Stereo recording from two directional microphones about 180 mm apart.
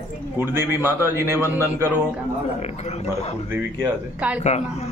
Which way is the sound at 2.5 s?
40° left (ahead or behind).